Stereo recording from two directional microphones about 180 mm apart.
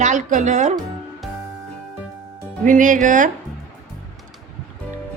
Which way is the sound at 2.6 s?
45° right (ahead or behind).